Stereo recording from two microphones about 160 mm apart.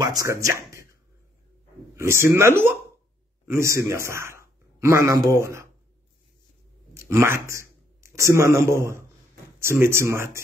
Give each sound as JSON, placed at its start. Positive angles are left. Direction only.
{"t": 0.0, "sound": "speech", "side_deg": -20}
{"t": 2.0, "sound": "speech", "side_deg": -15}
{"t": 7.0, "sound": "speech", "side_deg": -15}